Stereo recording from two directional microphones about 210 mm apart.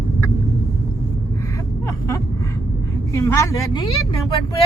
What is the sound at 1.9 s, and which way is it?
Vehicle, 15° left (ahead or behind).